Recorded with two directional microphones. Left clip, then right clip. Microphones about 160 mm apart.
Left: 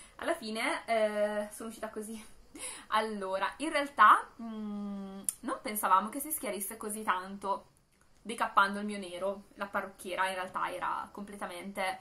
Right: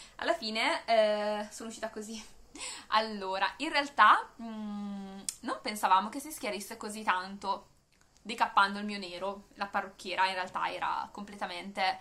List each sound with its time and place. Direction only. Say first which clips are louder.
0.2 s a woman's voice: right 3 dB; 5° right (ahead or behind)
1.6 s a woman's voice: right 1 dB; 15° right (ahead or behind)
2.5 s a woman's voice: right 2 dB; centre (ahead or behind)